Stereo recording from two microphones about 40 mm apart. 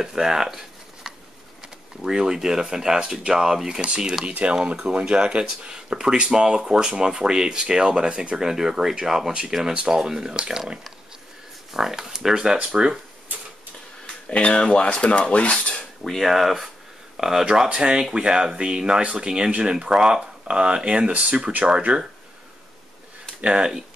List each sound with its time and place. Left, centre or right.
0.0 s speech: centre
4.3 s speech: right
4.7 s speech: right
12.5 s speech: right
14.3 s speech: left
15.8 s speech: centre; by 22.0 s right